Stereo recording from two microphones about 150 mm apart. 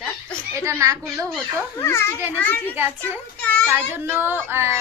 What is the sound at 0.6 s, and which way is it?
Speech, 20° right (ahead or behind).